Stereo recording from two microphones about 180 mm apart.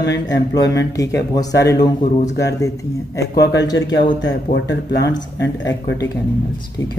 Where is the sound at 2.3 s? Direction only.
70° left (ahead or behind).